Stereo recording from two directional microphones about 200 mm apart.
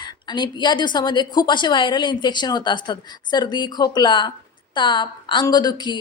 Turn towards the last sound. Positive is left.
turn(degrees=20)  # may be behind; listen again after turning